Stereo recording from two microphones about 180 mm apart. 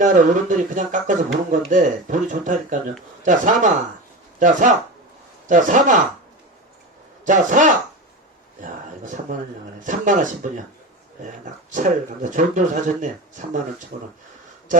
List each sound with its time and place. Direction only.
0.0 s speech: 45° right (ahead or behind)
7.3 s speech: 45° right (ahead or behind)
9.8 s speech: 45° right (ahead or behind)
11.7 s speech: 45° right (ahead or behind)